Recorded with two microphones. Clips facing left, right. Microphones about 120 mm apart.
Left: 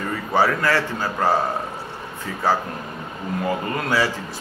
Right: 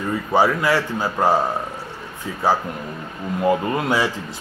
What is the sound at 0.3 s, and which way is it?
A man's voice, 15° right (ahead or behind).